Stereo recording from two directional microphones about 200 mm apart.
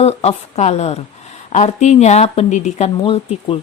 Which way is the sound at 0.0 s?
30° left (ahead or behind).